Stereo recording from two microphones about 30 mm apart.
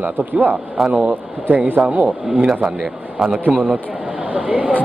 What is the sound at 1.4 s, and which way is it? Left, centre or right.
Speech, right.